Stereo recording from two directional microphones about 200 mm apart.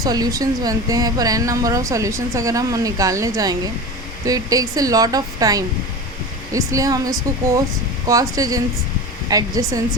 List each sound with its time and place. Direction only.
0.0 s speech: 20° right (ahead or behind)